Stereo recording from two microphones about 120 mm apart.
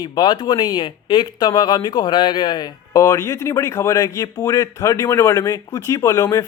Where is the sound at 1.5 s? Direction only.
35° left (ahead or behind).